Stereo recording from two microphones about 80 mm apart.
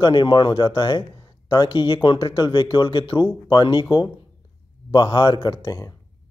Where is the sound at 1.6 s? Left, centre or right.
Left.